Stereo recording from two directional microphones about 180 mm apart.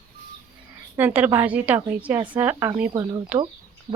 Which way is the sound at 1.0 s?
10° right (ahead or behind).